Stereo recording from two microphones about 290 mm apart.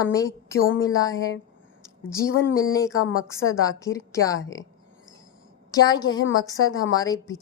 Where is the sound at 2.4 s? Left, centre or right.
Centre.